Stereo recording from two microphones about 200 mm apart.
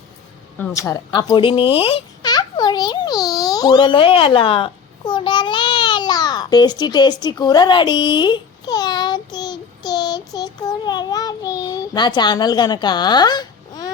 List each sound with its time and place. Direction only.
0.6 s babbling: 15° left (ahead or behind)